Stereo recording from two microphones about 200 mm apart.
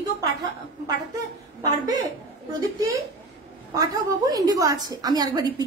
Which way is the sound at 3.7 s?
15° right (ahead or behind).